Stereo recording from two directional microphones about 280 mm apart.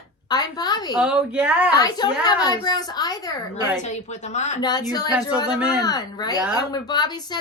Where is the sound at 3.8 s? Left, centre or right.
Left.